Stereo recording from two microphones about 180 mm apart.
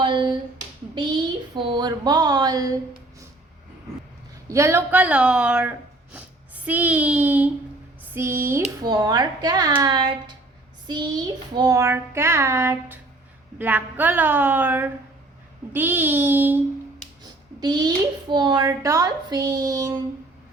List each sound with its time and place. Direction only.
0.0 s a sound: 25° right (ahead or behind)
1.5 s a child's voice: 25° right (ahead or behind)
4.4 s a child's voice: 15° right (ahead or behind)
17.6 s a child's voice: 20° right (ahead or behind)